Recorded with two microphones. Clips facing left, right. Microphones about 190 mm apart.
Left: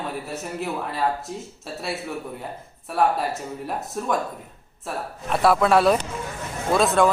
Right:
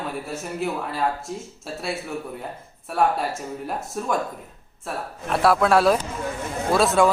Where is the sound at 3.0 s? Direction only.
Centre (ahead or behind).